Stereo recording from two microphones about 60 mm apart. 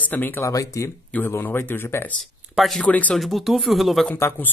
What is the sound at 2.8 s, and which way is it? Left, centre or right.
Speech, left.